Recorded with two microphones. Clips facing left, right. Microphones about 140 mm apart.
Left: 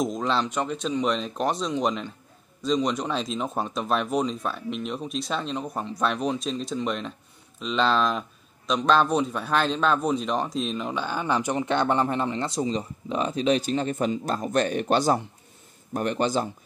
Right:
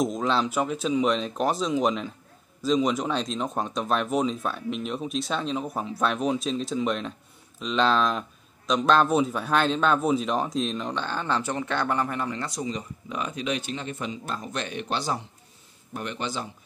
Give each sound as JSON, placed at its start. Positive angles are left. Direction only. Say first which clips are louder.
{"t": 0.0, "sound": "speech", "louder": "right 1 dB", "side_deg": 0}